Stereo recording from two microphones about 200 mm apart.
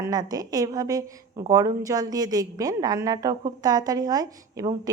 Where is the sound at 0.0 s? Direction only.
20° right (ahead or behind).